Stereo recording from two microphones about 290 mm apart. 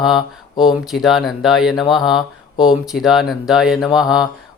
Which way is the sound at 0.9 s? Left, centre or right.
Centre.